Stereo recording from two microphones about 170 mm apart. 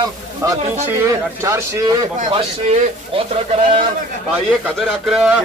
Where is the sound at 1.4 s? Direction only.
15° right (ahead or behind).